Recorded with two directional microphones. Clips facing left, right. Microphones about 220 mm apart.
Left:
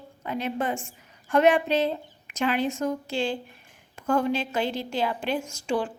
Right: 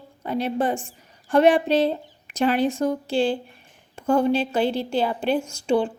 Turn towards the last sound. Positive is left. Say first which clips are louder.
# right 6 dB
turn(degrees=-30)  # may be behind; listen again after turning